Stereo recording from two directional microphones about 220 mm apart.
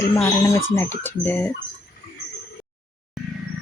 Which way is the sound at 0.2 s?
10° left (ahead or behind).